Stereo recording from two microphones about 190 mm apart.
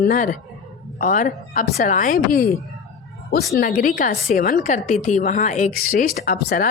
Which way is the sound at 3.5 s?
50° left (ahead or behind).